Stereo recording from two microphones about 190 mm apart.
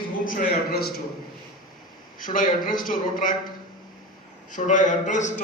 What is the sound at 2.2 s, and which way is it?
A man's voice, 45° left (ahead or behind).